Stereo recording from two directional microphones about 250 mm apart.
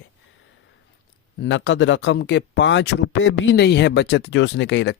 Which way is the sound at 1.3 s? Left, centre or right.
Left.